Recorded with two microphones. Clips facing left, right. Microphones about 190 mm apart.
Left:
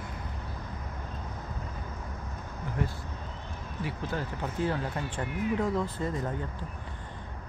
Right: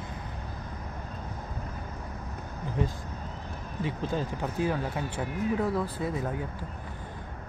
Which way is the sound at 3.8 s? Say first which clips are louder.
Right 3 dB; 15° right (ahead or behind).